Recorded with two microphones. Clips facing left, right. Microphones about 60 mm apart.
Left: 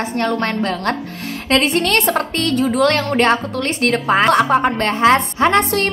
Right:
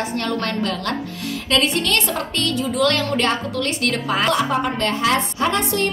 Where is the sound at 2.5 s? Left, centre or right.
Left.